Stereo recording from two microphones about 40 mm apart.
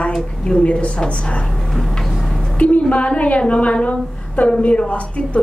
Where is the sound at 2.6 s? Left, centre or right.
Left.